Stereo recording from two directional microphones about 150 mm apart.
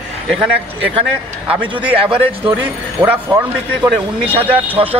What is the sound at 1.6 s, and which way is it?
Speech, 35° right (ahead or behind).